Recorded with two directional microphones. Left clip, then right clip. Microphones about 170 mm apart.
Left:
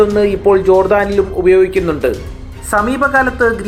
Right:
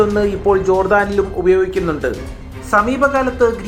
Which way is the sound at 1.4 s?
15° left (ahead or behind).